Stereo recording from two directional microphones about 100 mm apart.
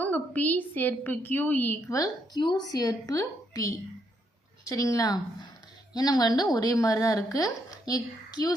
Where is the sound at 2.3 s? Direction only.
45° left (ahead or behind).